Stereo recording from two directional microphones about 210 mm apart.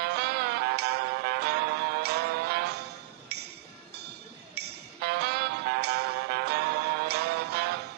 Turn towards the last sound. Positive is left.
turn(degrees=-50)  # may be behind; listen again after turning